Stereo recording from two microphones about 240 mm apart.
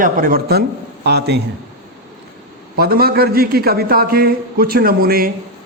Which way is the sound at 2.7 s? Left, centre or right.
Right.